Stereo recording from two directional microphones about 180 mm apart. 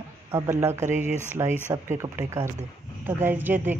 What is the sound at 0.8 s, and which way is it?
Speech, 40° right (ahead or behind).